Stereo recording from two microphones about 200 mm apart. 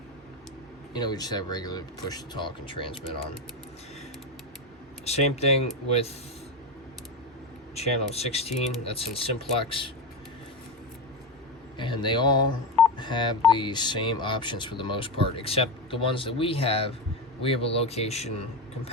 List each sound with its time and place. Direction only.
0.9 s speech: 20° left (ahead or behind)
5.0 s speech: 30° left (ahead or behind)
7.8 s speech: 30° left (ahead or behind)
11.8 s speech: 20° left (ahead or behind)